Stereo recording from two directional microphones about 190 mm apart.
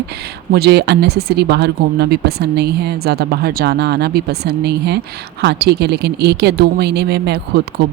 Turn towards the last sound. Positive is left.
turn(degrees=-55)  # may be behind; listen again after turning